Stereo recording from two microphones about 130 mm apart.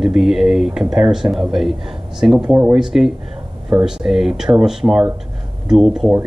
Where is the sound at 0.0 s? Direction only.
Centre (ahead or behind).